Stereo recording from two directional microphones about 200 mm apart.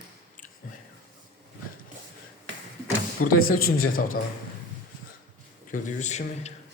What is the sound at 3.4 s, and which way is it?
Speech, 45° left (ahead or behind).